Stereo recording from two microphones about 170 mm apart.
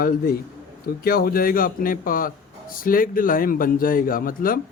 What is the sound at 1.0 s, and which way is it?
Speech, 60° left (ahead or behind).